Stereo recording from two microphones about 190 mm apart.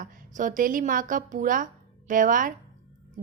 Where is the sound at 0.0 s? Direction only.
45° right (ahead or behind).